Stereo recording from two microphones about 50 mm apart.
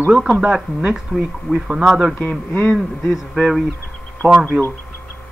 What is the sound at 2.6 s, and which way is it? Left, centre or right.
Speech, centre.